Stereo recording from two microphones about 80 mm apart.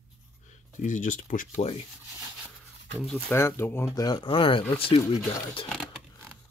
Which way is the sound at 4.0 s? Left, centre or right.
Left.